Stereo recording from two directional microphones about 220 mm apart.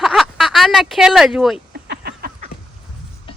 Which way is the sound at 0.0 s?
Centre (ahead or behind).